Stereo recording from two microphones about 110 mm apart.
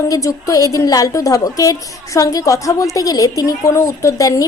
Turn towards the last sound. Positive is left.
turn(degrees=30)  # may be behind; listen again after turning